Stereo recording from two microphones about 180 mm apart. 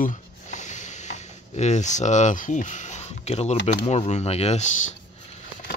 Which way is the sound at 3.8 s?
35° left (ahead or behind).